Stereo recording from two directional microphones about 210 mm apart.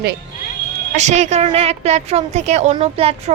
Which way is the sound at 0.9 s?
35° right (ahead or behind).